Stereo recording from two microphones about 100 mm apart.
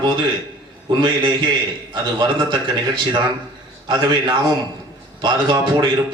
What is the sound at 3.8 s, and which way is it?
A man's voice, 55° right (ahead or behind).